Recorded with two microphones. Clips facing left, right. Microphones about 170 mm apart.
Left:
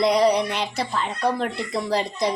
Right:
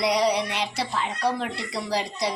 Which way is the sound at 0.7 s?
50° left (ahead or behind).